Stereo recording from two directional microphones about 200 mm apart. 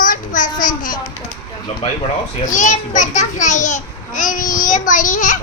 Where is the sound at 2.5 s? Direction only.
40° left (ahead or behind).